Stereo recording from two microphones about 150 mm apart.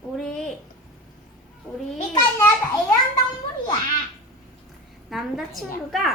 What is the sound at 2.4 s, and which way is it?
Speech, 20° left (ahead or behind).